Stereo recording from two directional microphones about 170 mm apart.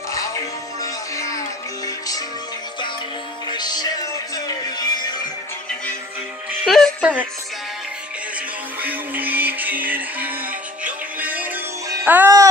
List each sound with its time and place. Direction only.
0.1 s music: 20° left (ahead or behind)
3.4 s music: 25° left (ahead or behind)
6.6 s music: centre (ahead or behind)
8.8 s music: 10° right (ahead or behind)